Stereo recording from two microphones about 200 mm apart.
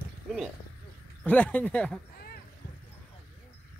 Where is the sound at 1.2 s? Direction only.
10° left (ahead or behind).